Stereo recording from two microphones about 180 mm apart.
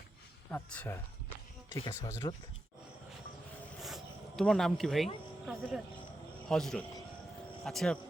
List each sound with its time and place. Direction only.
0.5 s speech: 10° left (ahead or behind)
1.7 s speech: 20° left (ahead or behind)
3.8 s a sound: centre (ahead or behind)
5.5 s speech: centre (ahead or behind)